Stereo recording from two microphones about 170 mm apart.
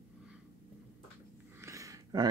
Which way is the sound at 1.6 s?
20° right (ahead or behind).